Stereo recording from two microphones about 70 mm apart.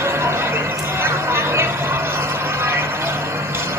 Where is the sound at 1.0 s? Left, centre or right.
Right.